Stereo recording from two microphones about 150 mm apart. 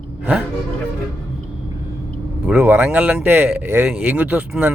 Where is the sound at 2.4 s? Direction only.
10° right (ahead or behind).